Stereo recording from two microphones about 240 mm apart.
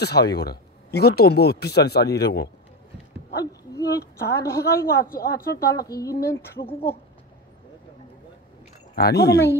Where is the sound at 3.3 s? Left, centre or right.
Centre.